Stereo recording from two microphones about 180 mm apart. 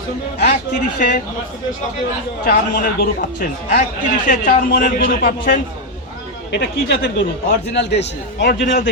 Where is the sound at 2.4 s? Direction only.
55° left (ahead or behind).